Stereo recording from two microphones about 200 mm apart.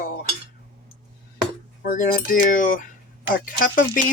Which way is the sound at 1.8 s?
40° left (ahead or behind).